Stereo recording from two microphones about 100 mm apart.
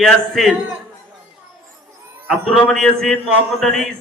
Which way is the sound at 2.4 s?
5° left (ahead or behind).